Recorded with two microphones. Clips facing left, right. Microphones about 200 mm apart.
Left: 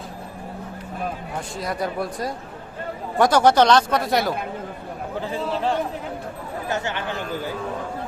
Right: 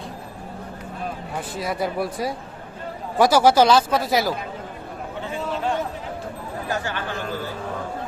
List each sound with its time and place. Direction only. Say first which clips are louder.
1.5 s speech: right 1 dB; 5° right (ahead or behind)
5.2 s chatter: left 1 dB; 35° left (ahead or behind)
6.7 s speech: left 1 dB; 20° left (ahead or behind)